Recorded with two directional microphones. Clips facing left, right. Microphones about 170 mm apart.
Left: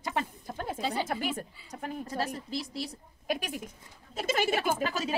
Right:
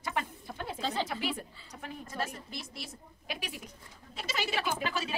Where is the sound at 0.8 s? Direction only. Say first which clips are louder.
Left 1 dB; 10° left (ahead or behind).